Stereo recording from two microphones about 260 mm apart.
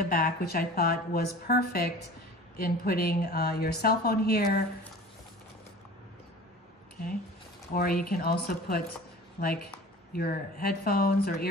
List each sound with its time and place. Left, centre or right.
0.1 s speech: left
7.7 s speech: left